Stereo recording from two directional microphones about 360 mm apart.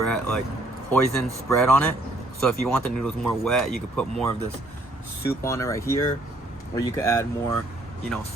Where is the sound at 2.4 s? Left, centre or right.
Centre.